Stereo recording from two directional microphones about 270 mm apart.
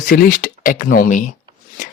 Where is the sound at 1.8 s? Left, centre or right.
Left.